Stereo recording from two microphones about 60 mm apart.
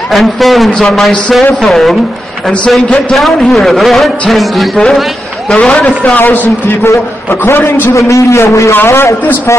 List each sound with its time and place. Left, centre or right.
0.1 s a man's voice: centre
6.1 s a man's voice: left
7.2 s a man's voice: left
8.1 s a man's voice: left
8.8 s a man's voice: left